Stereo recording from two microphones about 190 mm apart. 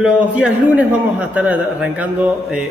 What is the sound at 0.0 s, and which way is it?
A man's voice, 5° right (ahead or behind).